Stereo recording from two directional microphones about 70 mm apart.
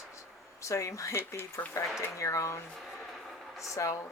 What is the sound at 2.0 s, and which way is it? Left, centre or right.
Speech, left.